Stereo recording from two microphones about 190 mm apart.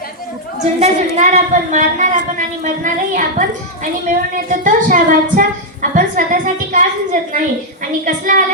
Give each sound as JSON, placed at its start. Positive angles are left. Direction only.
{"t": 0.8, "sound": "a woman's voice", "side_deg": -35}